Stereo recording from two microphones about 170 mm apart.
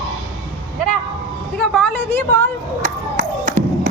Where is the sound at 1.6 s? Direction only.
5° left (ahead or behind).